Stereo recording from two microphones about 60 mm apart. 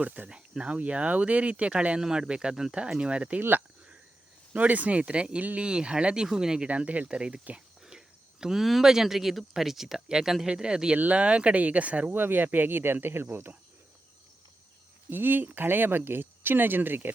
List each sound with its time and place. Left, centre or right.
0.0 s speech: right
0.3 s speech: centre
4.5 s speech: right; by 6.7 s centre
6.7 s speech: right
15.1 s speech: right